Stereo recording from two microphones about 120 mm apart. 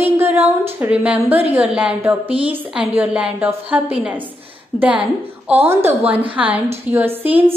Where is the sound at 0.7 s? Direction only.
10° right (ahead or behind).